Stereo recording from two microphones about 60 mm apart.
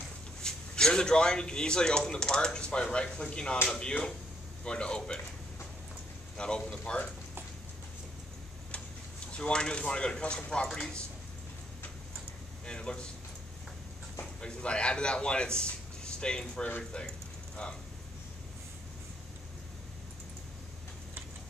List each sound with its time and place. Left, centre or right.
0.4 s speech: centre
6.3 s speech: centre
9.4 s speech: centre
12.6 s speech: centre
14.4 s a man's voice: centre